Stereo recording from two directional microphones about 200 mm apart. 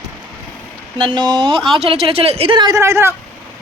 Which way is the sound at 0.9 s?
25° right (ahead or behind).